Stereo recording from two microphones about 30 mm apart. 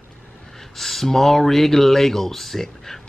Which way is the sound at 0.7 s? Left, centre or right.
Centre.